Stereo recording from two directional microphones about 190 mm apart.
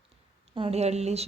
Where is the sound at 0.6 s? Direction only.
30° right (ahead or behind).